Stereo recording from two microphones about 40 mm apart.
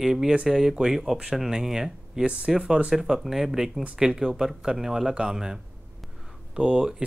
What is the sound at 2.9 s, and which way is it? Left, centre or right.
Speech, centre.